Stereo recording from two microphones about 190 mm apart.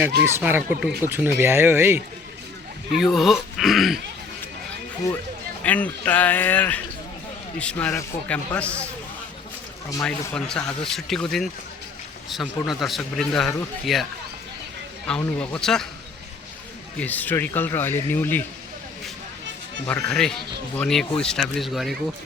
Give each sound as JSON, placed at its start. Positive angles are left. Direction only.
{"t": 0.3, "sound": "speech", "side_deg": -10}
{"t": 2.9, "sound": "speech", "side_deg": 0}
{"t": 5.6, "sound": "speech", "side_deg": 10}
{"t": 10.0, "sound": "speech", "side_deg": 5}
{"t": 17.0, "sound": "speech", "side_deg": 10}
{"t": 19.9, "sound": "speech", "side_deg": 5}